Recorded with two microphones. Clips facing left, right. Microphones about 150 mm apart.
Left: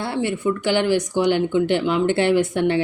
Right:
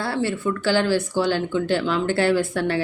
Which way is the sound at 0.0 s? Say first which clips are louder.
Left 1 dB; 20° left (ahead or behind).